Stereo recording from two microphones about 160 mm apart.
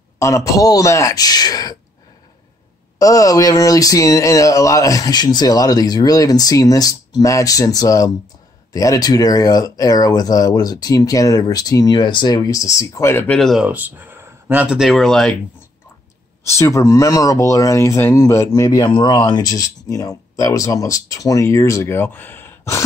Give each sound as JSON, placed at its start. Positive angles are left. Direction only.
{"t": 0.2, "sound": "speech", "side_deg": 20}
{"t": 3.0, "sound": "speech", "side_deg": 20}
{"t": 13.4, "sound": "speech", "side_deg": 0}
{"t": 13.7, "sound": "speech", "side_deg": -10}
{"t": 16.4, "sound": "speech", "side_deg": 20}